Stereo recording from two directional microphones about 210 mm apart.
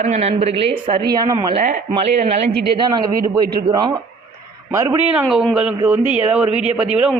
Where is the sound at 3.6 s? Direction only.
20° right (ahead or behind).